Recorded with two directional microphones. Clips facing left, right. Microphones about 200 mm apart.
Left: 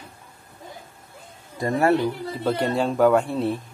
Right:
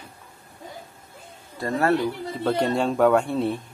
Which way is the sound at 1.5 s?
15° left (ahead or behind).